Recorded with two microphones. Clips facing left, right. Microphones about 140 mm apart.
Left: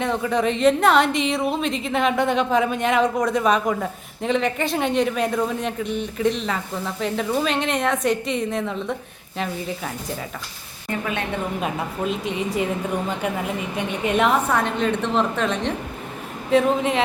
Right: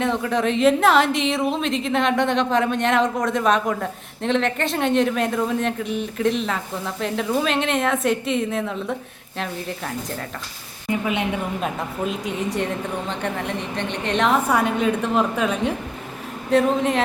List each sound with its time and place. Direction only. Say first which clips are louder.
0.0 s a woman's voice: even; centre (ahead or behind)
10.8 s a woman's voice: right 3 dB; 15° right (ahead or behind)
11.6 s a woman's voice: even; centre (ahead or behind)
14.4 s a woman's voice: right 2 dB; 10° right (ahead or behind)